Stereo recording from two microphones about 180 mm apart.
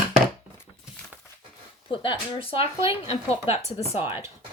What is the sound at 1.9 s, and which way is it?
Speech, 30° left (ahead or behind).